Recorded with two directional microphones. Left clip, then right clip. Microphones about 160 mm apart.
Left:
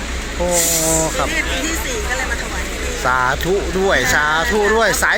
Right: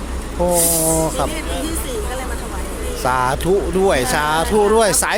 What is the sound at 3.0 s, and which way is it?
Speech, 30° right (ahead or behind).